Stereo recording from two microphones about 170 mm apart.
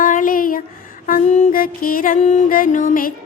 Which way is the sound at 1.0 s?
50° left (ahead or behind).